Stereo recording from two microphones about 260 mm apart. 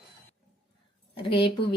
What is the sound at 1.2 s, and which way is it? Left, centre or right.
Speech, centre.